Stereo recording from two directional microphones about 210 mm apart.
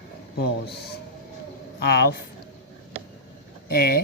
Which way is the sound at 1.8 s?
50° left (ahead or behind).